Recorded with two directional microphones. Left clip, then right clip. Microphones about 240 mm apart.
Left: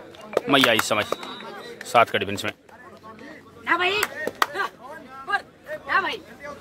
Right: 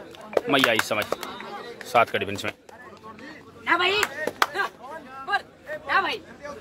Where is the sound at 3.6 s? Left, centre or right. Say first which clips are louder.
Even; centre.